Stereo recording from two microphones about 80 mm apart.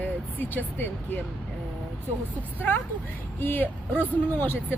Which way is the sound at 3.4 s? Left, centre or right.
Left.